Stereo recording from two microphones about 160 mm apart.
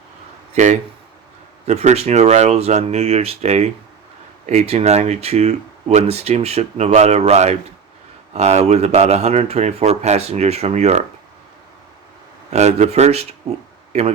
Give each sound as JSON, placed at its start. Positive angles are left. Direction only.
{"t": 0.5, "sound": "speech", "side_deg": -45}
{"t": 12.5, "sound": "speech", "side_deg": -45}